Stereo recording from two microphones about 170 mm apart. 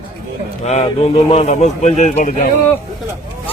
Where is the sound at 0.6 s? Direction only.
40° left (ahead or behind).